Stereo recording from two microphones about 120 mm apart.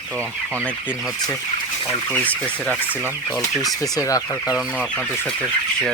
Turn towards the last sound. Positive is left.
turn(degrees=30)  # may be behind; listen again after turning